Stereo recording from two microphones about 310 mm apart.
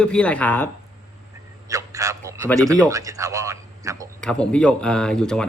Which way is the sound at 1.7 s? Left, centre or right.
Centre.